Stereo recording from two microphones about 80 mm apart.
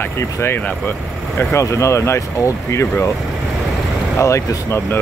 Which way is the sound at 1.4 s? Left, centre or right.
Left.